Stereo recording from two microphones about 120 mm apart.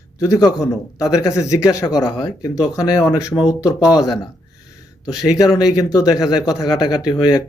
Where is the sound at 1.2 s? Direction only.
30° left (ahead or behind).